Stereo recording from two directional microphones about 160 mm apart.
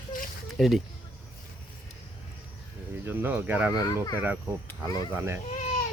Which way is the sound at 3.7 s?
25° left (ahead or behind).